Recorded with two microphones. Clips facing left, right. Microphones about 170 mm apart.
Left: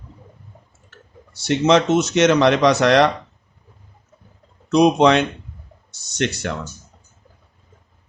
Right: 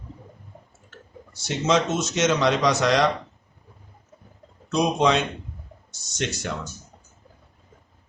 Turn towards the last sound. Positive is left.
turn(degrees=65)  # may be behind; listen again after turning